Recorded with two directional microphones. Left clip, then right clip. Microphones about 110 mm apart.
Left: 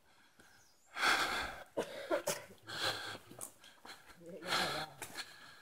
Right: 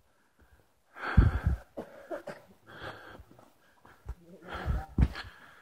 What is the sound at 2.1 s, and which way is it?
Sneeze, 10° left (ahead or behind).